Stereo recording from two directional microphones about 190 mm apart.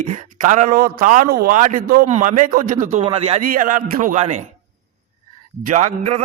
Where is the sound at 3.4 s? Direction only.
45° right (ahead or behind).